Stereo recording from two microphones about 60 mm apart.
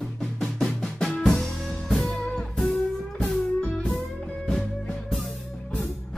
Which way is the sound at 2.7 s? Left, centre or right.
Left.